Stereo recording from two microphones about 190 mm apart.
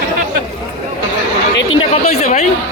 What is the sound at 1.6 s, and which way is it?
Speech, 90° left.